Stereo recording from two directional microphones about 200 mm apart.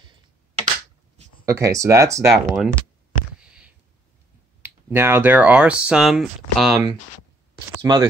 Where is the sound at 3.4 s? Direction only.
5° right (ahead or behind).